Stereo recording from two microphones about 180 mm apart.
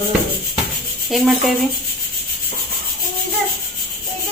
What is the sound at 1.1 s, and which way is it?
Speech, centre (ahead or behind).